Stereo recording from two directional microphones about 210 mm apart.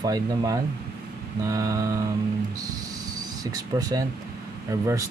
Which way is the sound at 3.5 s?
15° right (ahead or behind).